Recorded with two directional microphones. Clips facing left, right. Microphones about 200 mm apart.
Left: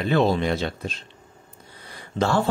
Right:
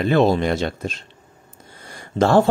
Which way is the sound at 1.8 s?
45° right (ahead or behind).